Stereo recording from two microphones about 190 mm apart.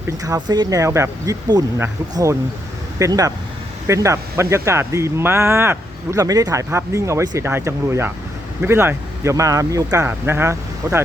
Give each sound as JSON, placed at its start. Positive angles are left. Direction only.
{"t": 0.3, "sound": "speech", "side_deg": -20}